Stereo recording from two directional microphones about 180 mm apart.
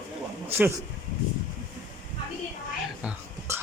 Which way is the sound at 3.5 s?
15° right (ahead or behind).